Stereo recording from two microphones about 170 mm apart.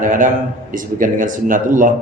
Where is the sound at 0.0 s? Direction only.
50° right (ahead or behind).